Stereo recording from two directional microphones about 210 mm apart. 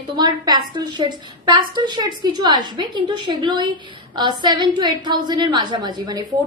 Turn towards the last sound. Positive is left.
turn(degrees=-20)  # may be behind; listen again after turning